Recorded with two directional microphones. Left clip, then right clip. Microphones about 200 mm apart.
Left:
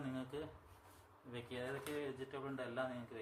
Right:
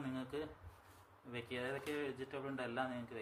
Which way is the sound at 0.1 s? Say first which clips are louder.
Right 1 dB; 10° right (ahead or behind).